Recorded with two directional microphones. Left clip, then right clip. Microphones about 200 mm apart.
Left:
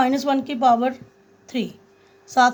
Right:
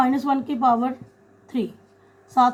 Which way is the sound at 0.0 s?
55° left (ahead or behind).